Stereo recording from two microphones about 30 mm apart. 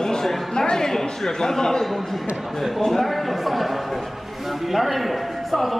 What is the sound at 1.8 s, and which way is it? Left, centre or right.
A man's voice, centre.